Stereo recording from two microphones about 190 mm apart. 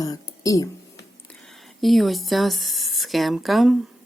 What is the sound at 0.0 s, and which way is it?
Speech, 20° left (ahead or behind).